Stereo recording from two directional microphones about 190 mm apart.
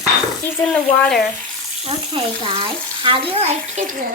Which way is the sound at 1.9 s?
30° right (ahead or behind).